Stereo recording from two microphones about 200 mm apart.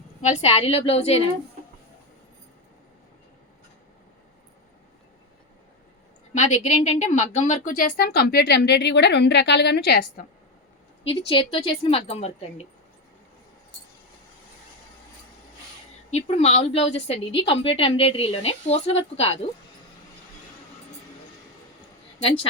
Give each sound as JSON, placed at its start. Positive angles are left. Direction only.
{"t": 0.2, "sound": "speech", "side_deg": 35}
{"t": 6.3, "sound": "speech", "side_deg": 35}
{"t": 11.3, "sound": "a woman's voice", "side_deg": 25}
{"t": 16.0, "sound": "speech", "side_deg": 30}